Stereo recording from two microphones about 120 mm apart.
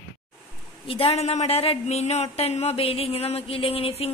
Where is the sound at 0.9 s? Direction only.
60° left (ahead or behind).